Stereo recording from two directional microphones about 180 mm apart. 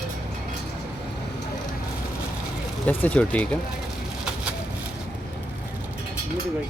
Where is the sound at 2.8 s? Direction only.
10° left (ahead or behind).